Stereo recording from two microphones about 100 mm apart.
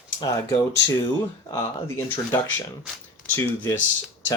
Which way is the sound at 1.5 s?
25° left (ahead or behind).